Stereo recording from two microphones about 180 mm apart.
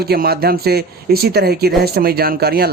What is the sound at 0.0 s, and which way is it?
Speech, 60° right (ahead or behind).